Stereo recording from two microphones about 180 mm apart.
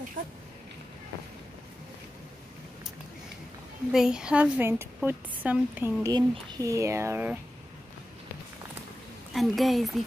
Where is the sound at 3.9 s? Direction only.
5° right (ahead or behind).